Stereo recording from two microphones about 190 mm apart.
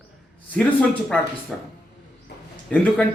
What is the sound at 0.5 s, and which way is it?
A man's voice, 5° left (ahead or behind).